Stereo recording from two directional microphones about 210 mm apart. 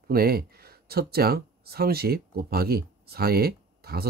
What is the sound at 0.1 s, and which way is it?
Speech, 45° right (ahead or behind).